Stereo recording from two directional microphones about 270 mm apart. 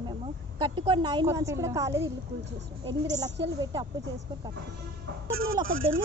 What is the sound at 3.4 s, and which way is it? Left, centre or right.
Speech, centre.